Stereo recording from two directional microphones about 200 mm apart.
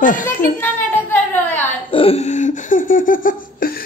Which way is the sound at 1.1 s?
10° left (ahead or behind).